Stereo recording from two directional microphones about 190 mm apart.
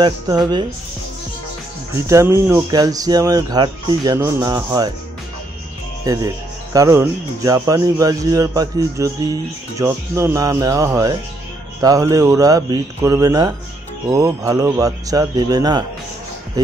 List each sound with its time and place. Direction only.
0.0 s speech: 20° right (ahead or behind)
2.0 s speech: 15° right (ahead or behind)
6.0 s speech: 15° right (ahead or behind)